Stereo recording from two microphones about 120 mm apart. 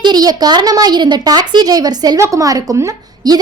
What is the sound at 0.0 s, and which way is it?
A woman's voice, 35° right (ahead or behind).